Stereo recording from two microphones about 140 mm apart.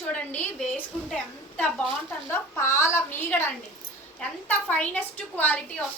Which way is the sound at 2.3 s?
20° left (ahead or behind).